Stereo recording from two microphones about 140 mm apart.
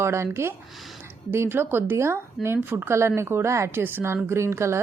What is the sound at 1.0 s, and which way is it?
A woman's voice, 15° right (ahead or behind).